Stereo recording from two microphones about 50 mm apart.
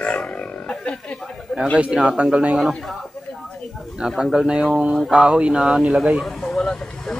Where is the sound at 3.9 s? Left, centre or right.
Centre.